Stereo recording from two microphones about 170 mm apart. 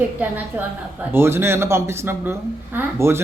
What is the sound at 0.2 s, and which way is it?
A woman's voice, 10° right (ahead or behind).